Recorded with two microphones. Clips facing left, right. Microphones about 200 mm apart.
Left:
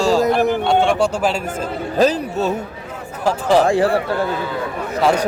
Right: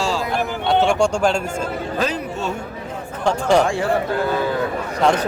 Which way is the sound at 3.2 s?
5° left (ahead or behind).